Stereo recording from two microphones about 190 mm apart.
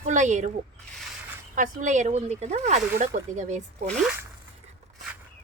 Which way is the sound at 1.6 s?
40° right (ahead or behind).